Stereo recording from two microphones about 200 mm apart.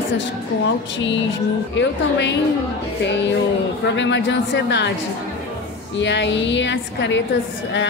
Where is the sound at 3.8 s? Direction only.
65° left (ahead or behind).